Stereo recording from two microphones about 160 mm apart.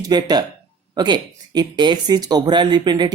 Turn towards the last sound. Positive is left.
turn(degrees=-25)  # may be behind; listen again after turning